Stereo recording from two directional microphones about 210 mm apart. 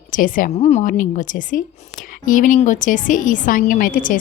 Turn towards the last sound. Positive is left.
turn(degrees=40)  # may be behind; listen again after turning